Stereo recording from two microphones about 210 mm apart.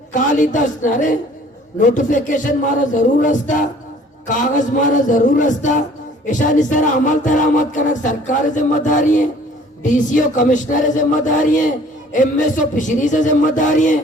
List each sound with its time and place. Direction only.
0.1 s music: 35° left (ahead or behind)